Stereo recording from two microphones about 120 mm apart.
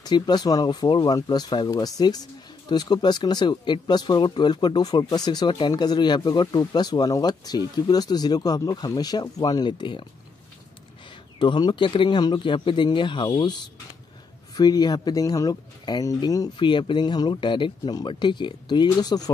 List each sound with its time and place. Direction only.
0.0 s speech: 35° left (ahead or behind)
11.3 s speech: 40° left (ahead or behind)
16.5 s speech: 45° left (ahead or behind)